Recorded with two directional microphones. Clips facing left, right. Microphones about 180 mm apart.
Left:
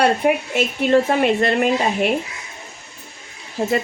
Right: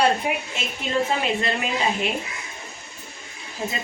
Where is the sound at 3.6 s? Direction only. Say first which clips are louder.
Left 9 dB; 65° left (ahead or behind).